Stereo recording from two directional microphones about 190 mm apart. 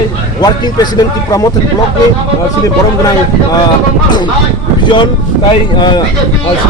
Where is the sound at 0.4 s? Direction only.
20° left (ahead or behind).